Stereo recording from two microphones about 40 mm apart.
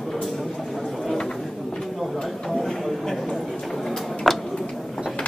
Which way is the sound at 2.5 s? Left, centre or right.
Centre.